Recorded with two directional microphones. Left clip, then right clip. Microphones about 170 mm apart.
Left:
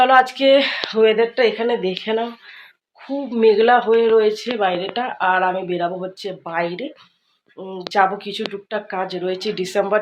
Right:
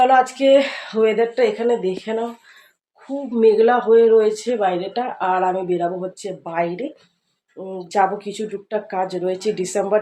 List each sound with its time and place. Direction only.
0.0 s speech: 5° right (ahead or behind)
1.4 s speech: 10° left (ahead or behind)
3.4 s speech: 15° left (ahead or behind); by 10.0 s 10° right (ahead or behind)